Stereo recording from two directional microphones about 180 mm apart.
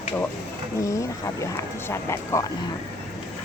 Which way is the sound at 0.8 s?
15° left (ahead or behind).